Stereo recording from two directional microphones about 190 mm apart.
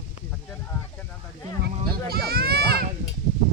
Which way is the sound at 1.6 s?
55° right (ahead or behind).